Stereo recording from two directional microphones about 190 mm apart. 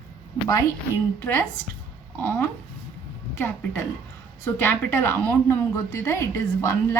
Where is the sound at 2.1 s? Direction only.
10° left (ahead or behind).